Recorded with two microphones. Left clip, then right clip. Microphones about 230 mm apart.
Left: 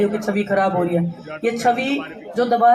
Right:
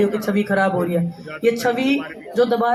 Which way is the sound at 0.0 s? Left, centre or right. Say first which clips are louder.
Right 1 dB; right.